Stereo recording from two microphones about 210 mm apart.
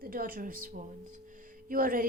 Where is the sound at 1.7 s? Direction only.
40° right (ahead or behind).